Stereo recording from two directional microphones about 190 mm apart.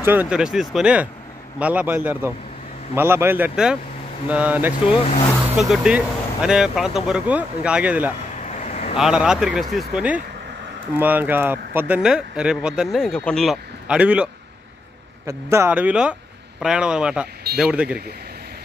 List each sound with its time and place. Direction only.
0.0 s speech: 10° right (ahead or behind)
8.5 s vehicle: 35° left (ahead or behind)
8.9 s speech: 5° right (ahead or behind)